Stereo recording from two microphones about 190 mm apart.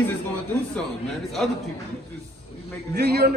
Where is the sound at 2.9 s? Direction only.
60° right (ahead or behind).